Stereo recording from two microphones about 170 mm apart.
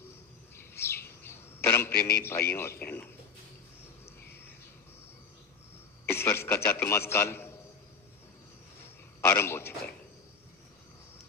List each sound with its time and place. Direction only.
0.6 s chirp: 15° left (ahead or behind)
1.9 s a man's voice: 65° left (ahead or behind)
2.5 s a man's voice: 15° left (ahead or behind)
6.0 s a man's voice: 15° left (ahead or behind)
9.2 s a man's voice: 15° left (ahead or behind)